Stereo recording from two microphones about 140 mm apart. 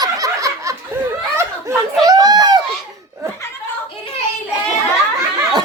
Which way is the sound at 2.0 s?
25° right (ahead or behind).